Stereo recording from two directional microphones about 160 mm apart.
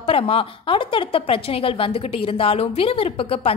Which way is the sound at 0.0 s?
35° left (ahead or behind).